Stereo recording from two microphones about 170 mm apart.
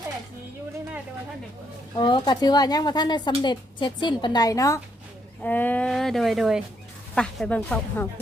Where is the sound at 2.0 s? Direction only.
25° left (ahead or behind).